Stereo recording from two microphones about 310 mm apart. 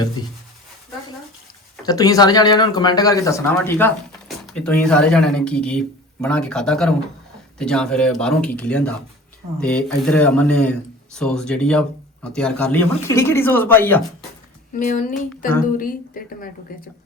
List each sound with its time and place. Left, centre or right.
1.7 s speech: centre
14.8 s a woman's voice: left